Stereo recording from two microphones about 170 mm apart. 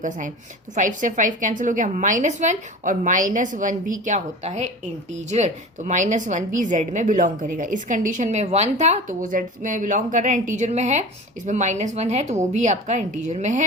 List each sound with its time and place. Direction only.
0.8 s a woman's voice: 50° right (ahead or behind)